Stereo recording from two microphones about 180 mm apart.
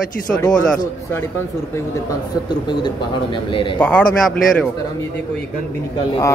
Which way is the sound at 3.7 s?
10° left (ahead or behind).